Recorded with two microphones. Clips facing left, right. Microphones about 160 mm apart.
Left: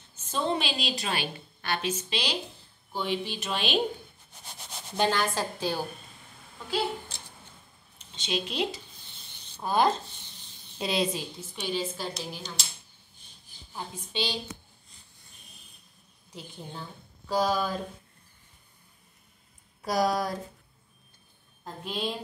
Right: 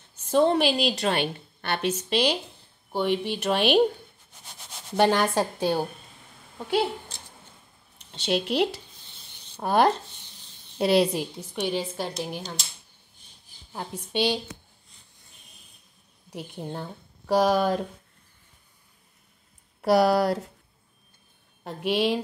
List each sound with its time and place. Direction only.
0.3 s a woman's voice: 65° right (ahead or behind)
4.9 s a woman's voice: 60° right (ahead or behind)
8.0 s a woman's voice: 65° right (ahead or behind)
13.7 s a woman's voice: 65° right (ahead or behind)
16.3 s a woman's voice: 65° right (ahead or behind)
17.3 s speech: 70° right (ahead or behind)
19.8 s speech: 70° right (ahead or behind)
21.6 s speech: 75° right (ahead or behind)